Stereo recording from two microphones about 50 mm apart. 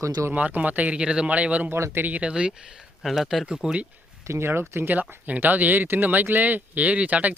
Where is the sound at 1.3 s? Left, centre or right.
Right.